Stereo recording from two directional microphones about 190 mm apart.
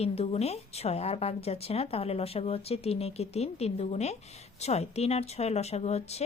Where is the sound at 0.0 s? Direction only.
30° left (ahead or behind).